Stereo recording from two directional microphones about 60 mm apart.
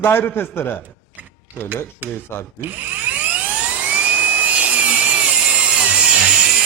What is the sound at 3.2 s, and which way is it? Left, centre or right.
Dental drill, right.